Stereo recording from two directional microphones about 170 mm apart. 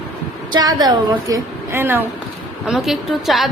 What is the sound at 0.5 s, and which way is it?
Speech, 25° right (ahead or behind).